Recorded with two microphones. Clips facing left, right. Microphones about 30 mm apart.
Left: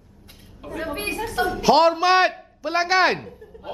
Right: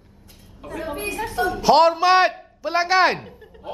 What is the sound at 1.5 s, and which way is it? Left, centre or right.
A man's voice, centre.